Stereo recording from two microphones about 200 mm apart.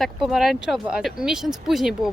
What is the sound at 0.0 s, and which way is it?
Speech, centre (ahead or behind).